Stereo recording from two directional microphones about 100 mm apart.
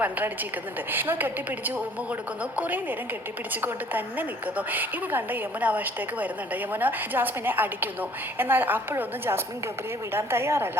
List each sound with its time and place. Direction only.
0.9 s a woman's voice: 20° right (ahead or behind)